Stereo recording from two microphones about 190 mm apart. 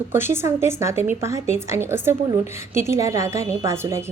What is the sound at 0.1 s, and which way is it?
A woman's voice, 10° right (ahead or behind).